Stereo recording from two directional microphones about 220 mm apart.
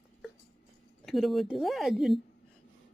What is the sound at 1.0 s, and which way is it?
Speech, centre (ahead or behind).